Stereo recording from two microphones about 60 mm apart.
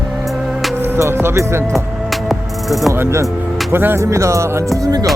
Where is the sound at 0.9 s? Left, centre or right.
Right.